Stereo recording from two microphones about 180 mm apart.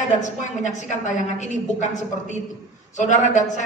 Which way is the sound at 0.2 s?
40° left (ahead or behind).